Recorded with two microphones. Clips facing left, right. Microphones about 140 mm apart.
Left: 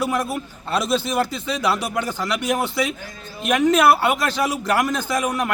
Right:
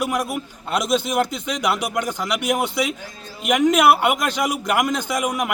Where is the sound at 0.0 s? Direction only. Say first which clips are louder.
Even; 15° right (ahead or behind).